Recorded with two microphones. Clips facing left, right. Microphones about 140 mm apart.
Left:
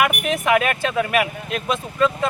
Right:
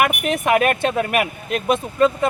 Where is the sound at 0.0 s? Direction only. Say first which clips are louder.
Right 1 dB; 50° right (ahead or behind).